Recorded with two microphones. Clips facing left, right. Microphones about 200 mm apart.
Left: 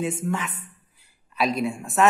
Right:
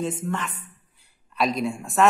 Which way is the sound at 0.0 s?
10° left (ahead or behind).